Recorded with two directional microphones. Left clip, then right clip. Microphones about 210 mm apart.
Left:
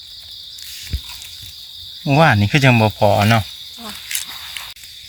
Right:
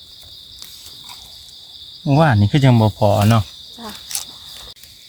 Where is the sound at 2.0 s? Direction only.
Centre (ahead or behind).